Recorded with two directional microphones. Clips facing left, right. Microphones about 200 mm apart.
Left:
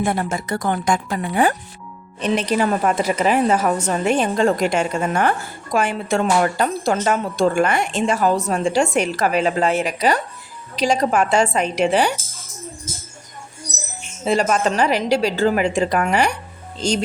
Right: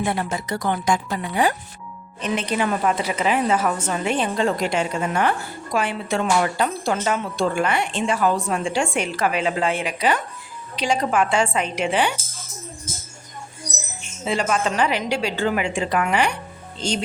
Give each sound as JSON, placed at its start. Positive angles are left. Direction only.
{"t": 0.0, "sound": "speech", "side_deg": 50}
{"t": 2.2, "sound": "a woman's voice", "side_deg": 40}
{"t": 14.3, "sound": "a woman's voice", "side_deg": 40}